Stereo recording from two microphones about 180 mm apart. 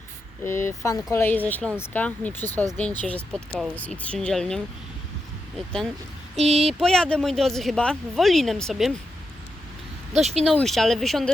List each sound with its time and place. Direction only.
0.4 s speech: 15° left (ahead or behind)
3.3 s speech: 5° right (ahead or behind)
6.3 s a sound: 35° right (ahead or behind)
6.7 s speech: centre (ahead or behind)
10.1 s a sound: 40° right (ahead or behind)
10.4 s speech: centre (ahead or behind)